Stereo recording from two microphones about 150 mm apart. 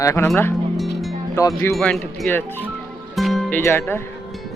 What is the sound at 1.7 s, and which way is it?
Speech, 5° left (ahead or behind).